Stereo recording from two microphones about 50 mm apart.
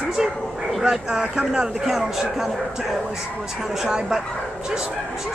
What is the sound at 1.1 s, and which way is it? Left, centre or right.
Speech, right.